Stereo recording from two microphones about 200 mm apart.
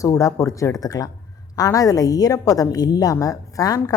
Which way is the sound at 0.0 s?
15° left (ahead or behind).